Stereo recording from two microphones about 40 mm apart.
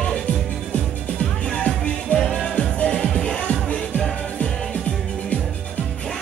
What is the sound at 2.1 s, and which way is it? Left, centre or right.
Music, left.